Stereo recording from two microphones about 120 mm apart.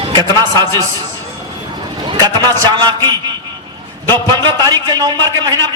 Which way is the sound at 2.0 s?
35° right (ahead or behind).